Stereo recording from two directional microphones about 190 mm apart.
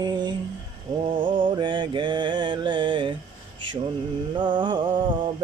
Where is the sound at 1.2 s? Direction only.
25° right (ahead or behind).